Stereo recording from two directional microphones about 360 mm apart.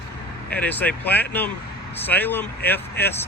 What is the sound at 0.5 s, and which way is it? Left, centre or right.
Speech, centre.